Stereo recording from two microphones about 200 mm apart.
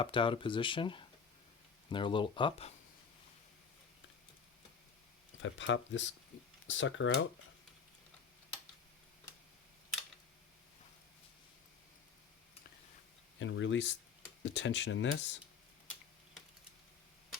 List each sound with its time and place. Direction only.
0.0 s speech: 25° left (ahead or behind)
5.4 s speech: 70° left (ahead or behind)
13.4 s speech: 70° left (ahead or behind)